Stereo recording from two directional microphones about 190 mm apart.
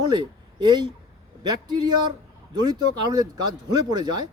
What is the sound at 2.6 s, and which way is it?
A man's voice, 20° right (ahead or behind).